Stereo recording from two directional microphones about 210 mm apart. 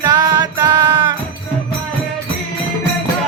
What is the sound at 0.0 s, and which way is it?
Music, 20° right (ahead or behind).